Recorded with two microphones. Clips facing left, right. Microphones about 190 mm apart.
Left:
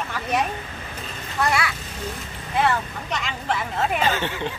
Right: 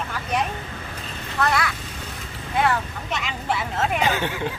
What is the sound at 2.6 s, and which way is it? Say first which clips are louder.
Speech: even; centre (ahead or behind).